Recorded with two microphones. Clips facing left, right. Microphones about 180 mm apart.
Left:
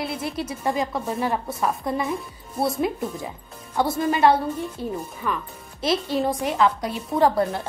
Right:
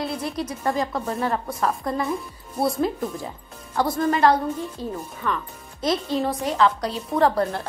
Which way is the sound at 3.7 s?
25° left (ahead or behind).